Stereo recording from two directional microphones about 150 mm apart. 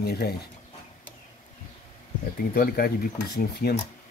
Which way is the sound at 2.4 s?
90° left.